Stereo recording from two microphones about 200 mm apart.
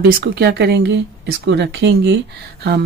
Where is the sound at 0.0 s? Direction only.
55° right (ahead or behind).